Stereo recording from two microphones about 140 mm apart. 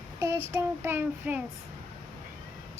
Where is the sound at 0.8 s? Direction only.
15° right (ahead or behind).